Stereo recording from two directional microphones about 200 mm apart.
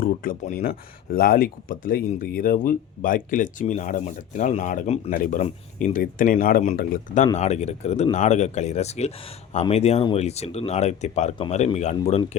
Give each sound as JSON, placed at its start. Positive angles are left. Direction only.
{"t": 0.0, "sound": "speech", "side_deg": 45}